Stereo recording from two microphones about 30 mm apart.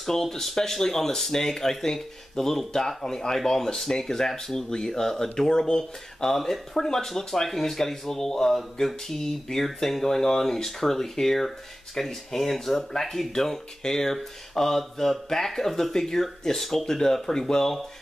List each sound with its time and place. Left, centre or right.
0.0 s speech: centre
4.7 s speech: left